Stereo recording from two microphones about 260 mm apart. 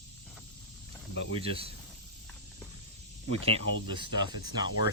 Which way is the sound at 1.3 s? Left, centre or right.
Right.